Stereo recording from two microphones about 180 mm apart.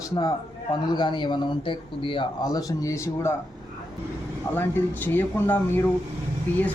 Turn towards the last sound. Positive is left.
turn(degrees=10)  # may be behind; listen again after turning